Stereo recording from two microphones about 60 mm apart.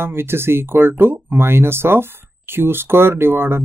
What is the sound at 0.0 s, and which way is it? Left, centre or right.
Speech, right.